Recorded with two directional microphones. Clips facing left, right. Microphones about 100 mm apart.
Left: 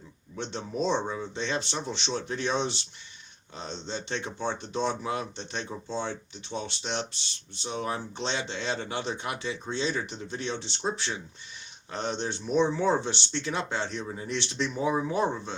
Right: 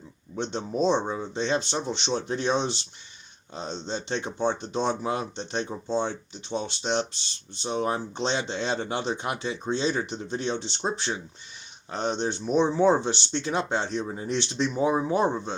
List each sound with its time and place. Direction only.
0.3 s speech: 25° right (ahead or behind)